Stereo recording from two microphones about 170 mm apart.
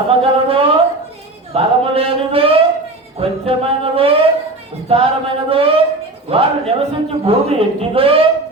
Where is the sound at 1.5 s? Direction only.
35° right (ahead or behind).